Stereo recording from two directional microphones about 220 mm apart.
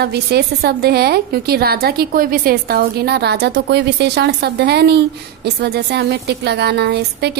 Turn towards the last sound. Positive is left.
turn(degrees=-50)  # may be behind; listen again after turning